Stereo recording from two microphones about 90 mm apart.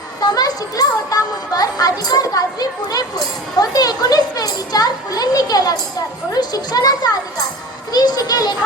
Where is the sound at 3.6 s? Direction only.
45° left (ahead or behind).